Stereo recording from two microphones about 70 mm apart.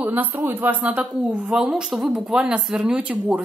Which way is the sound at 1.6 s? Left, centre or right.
Centre.